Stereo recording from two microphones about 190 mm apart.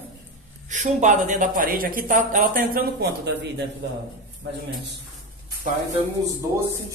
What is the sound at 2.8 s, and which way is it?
Speech, 60° right (ahead or behind).